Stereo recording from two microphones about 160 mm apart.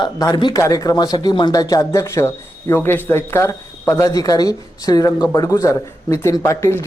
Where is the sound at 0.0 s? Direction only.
30° left (ahead or behind).